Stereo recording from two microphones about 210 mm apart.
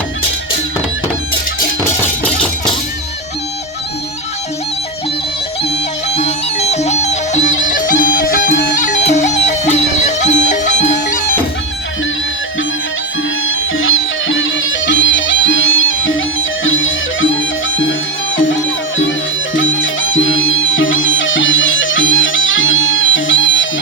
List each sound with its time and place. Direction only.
6.1 s music: 30° left (ahead or behind)
13.4 s music: 65° left (ahead or behind)